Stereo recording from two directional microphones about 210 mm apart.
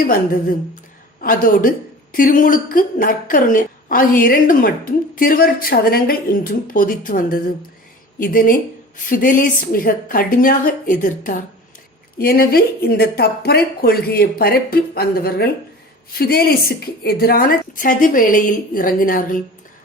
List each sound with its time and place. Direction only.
1.2 s a woman's voice: 40° left (ahead or behind)